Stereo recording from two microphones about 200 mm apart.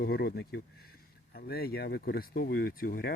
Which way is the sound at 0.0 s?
50° left (ahead or behind).